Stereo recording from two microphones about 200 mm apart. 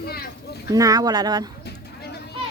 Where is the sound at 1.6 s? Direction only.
55° left (ahead or behind).